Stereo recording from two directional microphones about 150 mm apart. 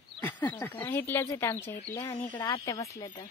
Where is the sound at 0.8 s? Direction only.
20° left (ahead or behind).